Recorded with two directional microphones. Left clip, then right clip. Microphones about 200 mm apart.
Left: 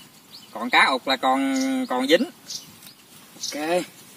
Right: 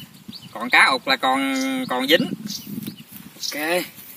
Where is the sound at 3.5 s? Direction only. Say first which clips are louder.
Right 1 dB; 5° left (ahead or behind).